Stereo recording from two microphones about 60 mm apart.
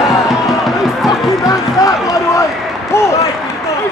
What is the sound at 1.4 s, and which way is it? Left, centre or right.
Basketball bounce, left.